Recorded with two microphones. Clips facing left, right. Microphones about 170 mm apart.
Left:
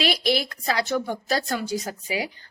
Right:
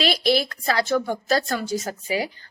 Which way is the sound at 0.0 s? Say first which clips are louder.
Right 2 dB; 15° left (ahead or behind).